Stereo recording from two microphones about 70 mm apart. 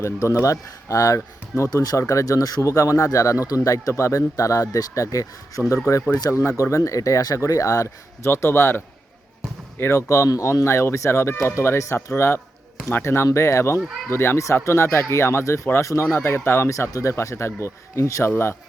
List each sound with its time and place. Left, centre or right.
0.0 s speech: left
1.7 s speech: left
8.3 s speech: left
10.1 s speech: left
16.9 s speech: left